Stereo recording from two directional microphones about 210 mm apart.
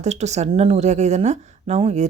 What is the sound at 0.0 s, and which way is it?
A woman's voice, 30° right (ahead or behind).